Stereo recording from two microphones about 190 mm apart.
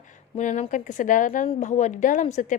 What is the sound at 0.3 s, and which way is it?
A woman's voice, 40° left (ahead or behind).